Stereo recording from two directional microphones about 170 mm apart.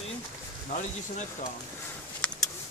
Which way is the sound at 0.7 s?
45° left (ahead or behind).